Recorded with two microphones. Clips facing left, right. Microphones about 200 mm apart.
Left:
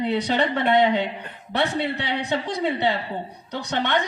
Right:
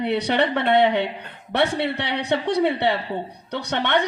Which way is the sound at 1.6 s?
65° right (ahead or behind).